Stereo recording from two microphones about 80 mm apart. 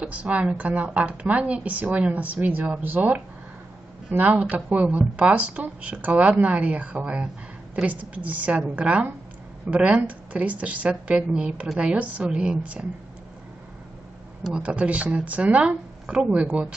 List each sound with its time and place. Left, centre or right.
0.0 s speech: centre
14.6 s speech: centre